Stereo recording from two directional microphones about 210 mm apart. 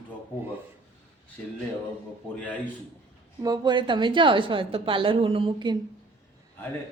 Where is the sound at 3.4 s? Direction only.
20° right (ahead or behind).